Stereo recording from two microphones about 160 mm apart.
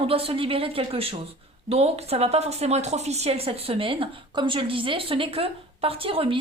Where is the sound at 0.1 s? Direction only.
35° right (ahead or behind).